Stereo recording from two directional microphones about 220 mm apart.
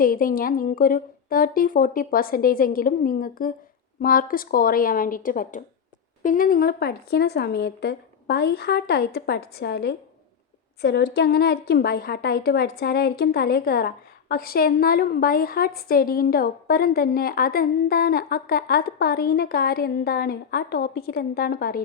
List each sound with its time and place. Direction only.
0.0 s a woman's voice: 40° left (ahead or behind)